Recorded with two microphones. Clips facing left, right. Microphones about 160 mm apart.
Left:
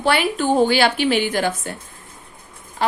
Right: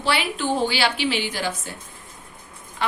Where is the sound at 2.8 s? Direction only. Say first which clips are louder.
Left 5 dB; 40° left (ahead or behind).